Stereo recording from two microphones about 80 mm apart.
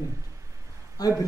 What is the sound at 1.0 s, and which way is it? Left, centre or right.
Speech, left.